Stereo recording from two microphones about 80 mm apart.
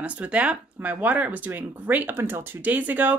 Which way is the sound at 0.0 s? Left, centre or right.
Centre.